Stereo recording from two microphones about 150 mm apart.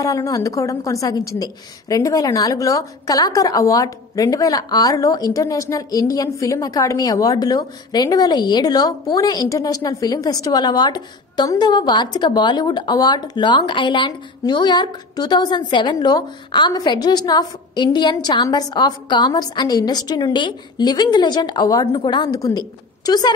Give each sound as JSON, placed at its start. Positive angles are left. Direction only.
{"t": 0.0, "sound": "a woman's voice", "side_deg": 20}